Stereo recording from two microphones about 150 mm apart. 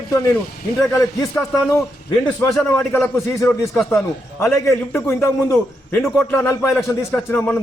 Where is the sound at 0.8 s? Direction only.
20° left (ahead or behind).